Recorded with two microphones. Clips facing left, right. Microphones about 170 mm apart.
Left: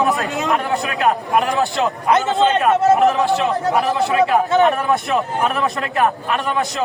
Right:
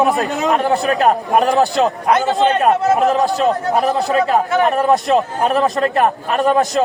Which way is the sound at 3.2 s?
40° right (ahead or behind).